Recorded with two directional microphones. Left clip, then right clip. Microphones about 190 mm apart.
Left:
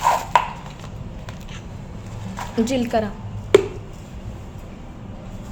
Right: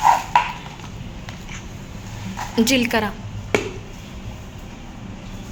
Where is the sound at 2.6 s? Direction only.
Centre (ahead or behind).